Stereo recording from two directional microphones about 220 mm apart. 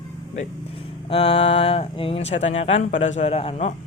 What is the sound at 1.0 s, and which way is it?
Speech, 25° left (ahead or behind).